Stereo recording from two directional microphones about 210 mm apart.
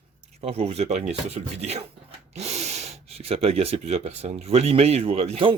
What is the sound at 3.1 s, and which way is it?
Speech, 30° right (ahead or behind).